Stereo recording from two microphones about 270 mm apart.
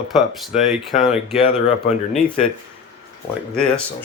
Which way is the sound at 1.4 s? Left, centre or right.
Centre.